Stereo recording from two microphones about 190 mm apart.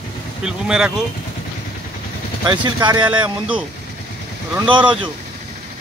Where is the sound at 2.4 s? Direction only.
25° right (ahead or behind).